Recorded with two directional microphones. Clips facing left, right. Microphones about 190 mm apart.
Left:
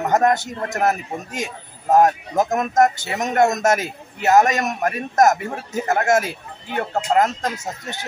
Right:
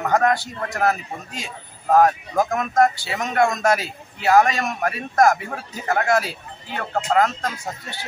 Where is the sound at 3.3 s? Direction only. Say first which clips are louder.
Left 2 dB; 45° left (ahead or behind).